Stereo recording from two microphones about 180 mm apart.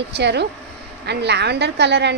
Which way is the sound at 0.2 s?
70° right (ahead or behind).